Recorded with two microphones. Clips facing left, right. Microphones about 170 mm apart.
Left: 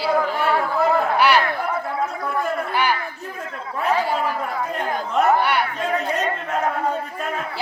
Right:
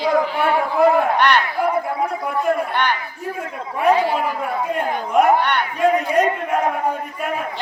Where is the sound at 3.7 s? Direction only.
10° right (ahead or behind).